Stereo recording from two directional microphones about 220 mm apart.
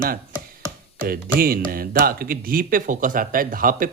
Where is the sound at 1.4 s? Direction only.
40° right (ahead or behind).